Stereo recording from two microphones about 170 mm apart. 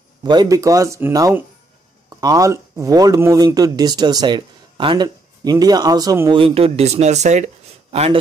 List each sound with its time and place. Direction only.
0.2 s speech: 25° right (ahead or behind)
6.3 s speech: 35° right (ahead or behind)